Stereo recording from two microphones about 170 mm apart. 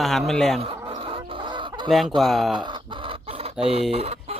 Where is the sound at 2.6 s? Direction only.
25° right (ahead or behind).